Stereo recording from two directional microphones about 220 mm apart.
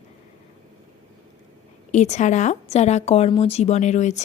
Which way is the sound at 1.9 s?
30° left (ahead or behind).